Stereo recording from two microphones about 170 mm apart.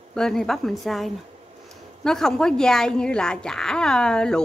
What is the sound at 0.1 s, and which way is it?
A woman's voice, 5° left (ahead or behind).